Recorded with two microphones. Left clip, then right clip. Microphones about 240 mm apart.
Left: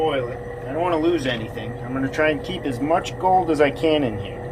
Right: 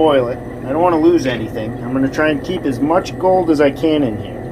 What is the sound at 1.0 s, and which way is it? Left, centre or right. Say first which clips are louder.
Speech: right 8 dB; centre.